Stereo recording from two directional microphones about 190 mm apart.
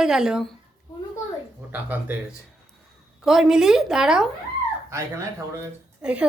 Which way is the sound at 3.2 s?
Centre (ahead or behind).